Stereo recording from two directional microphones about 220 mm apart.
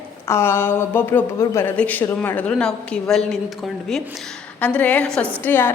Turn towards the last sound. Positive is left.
turn(degrees=10)  # may be behind; listen again after turning